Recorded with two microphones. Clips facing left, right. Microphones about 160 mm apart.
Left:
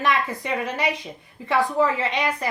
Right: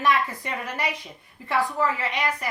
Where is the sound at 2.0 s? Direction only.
25° left (ahead or behind).